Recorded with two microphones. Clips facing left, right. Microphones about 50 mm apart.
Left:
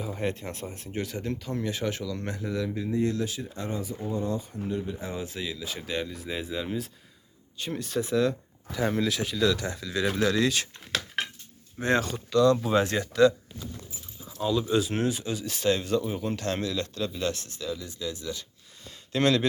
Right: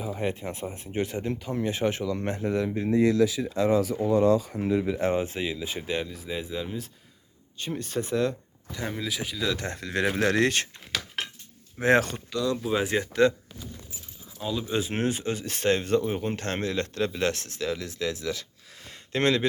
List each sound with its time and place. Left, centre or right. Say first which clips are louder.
0.0 s speech: right 1 dB; centre; by 2.6 s right
3.4 s speech: right 10 dB; right
5.1 s speech: right 6 dB; right
6.1 s speech: even; centre
7.7 s speech: left 1 dB; centre
9.6 s speech: right 1 dB; right
10.2 s speech: right 1 dB; right
11.8 s speech: right 4 dB; right
12.3 s speech: left 6 dB; centre
13.0 s speech: left 1 dB; right
14.3 s speech: left 4 dB; centre
14.7 s speech: left 1 dB; right
19.1 s speech: even; right